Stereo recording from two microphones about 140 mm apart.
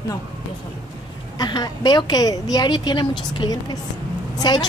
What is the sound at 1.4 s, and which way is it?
A woman's voice, 30° left (ahead or behind).